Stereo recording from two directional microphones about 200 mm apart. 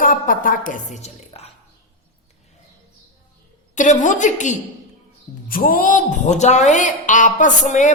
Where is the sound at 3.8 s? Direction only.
40° left (ahead or behind).